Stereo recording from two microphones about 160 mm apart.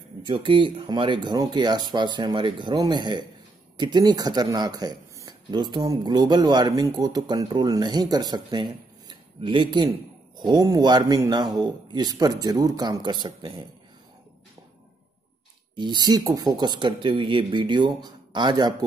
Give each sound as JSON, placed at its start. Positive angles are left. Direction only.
{"t": 0.2, "sound": "a man's voice", "side_deg": -30}
{"t": 15.7, "sound": "a man's voice", "side_deg": -30}